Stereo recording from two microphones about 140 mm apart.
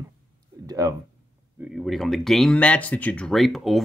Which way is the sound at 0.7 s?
25° right (ahead or behind).